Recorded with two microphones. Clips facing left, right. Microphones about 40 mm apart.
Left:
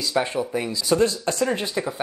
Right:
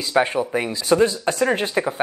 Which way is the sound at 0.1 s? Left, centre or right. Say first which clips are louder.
Right 5 dB; right.